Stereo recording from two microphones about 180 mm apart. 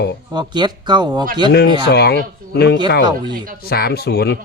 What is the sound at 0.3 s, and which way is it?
Speech, 25° right (ahead or behind).